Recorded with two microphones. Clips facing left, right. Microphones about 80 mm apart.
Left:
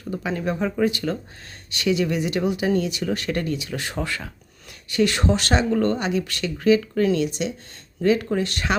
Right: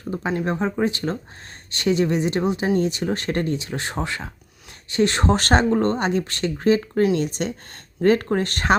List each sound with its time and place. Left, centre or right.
0.1 s speech: right